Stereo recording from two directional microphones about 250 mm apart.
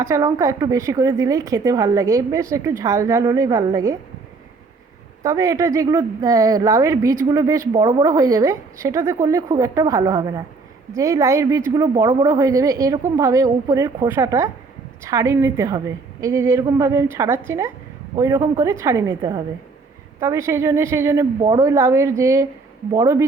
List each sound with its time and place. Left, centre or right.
0.0 s speech: centre
5.2 s speech: centre